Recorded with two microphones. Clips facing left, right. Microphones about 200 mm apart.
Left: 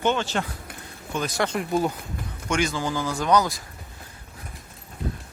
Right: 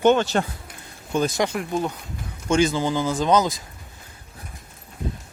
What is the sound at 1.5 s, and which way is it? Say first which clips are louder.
Speech: left 1 dB; 5° left (ahead or behind).